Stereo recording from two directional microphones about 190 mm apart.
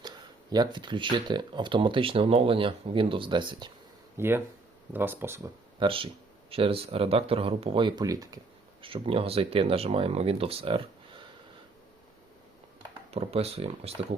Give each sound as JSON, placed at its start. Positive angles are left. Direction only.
{"t": 0.5, "sound": "speech", "side_deg": -20}
{"t": 4.2, "sound": "speech", "side_deg": -10}
{"t": 5.8, "sound": "speech", "side_deg": -30}
{"t": 8.8, "sound": "speech", "side_deg": -30}
{"t": 13.1, "sound": "speech", "side_deg": -30}